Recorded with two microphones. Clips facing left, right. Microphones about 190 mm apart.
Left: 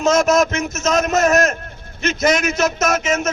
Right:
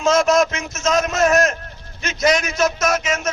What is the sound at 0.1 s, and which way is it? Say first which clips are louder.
A man's voice: even; 45° left (ahead or behind).